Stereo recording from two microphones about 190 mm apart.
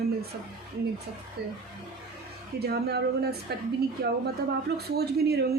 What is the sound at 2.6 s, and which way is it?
A woman's voice, 55° right (ahead or behind).